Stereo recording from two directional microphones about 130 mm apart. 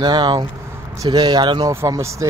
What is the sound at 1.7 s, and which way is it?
Speech, 20° right (ahead or behind).